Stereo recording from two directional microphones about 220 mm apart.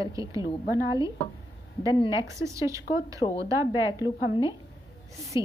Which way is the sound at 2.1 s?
15° right (ahead or behind).